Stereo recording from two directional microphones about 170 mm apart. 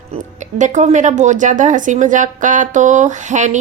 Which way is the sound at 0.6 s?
45° right (ahead or behind).